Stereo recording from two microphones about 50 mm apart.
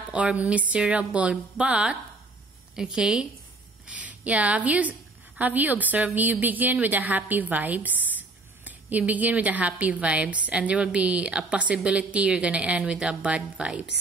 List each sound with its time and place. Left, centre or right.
0.1 s a woman's voice: right
3.8 s a sound: right
4.6 s a woman's voice: right